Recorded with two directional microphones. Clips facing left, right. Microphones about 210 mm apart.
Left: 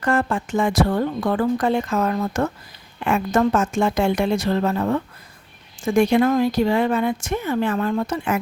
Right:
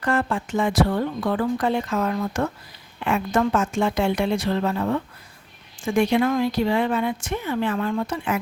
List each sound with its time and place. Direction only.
0.0 s speech: 45° left (ahead or behind)